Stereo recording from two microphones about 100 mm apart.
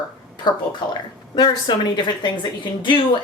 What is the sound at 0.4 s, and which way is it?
A woman's voice, 45° left (ahead or behind).